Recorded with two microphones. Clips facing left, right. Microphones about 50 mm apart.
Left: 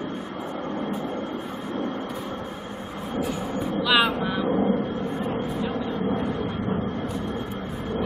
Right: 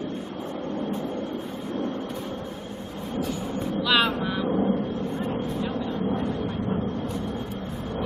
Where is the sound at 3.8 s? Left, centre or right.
Centre.